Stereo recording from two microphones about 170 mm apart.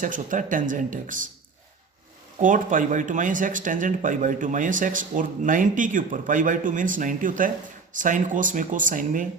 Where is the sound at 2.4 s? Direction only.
50° right (ahead or behind).